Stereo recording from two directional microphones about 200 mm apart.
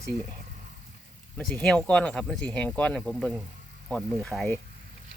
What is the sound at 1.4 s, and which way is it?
Speech, centre (ahead or behind).